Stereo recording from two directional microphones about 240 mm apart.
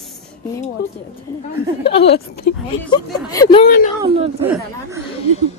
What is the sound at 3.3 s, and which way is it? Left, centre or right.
Speech, centre.